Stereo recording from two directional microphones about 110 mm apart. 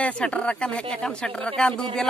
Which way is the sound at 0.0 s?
10° left (ahead or behind).